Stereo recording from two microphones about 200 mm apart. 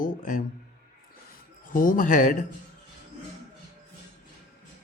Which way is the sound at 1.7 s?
40° left (ahead or behind).